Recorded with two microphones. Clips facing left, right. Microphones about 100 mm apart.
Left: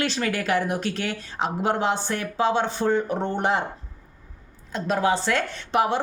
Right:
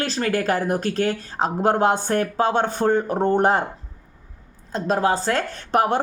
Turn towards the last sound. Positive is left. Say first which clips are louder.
# right 3 dB
turn(degrees=-45)  # may be behind; listen again after turning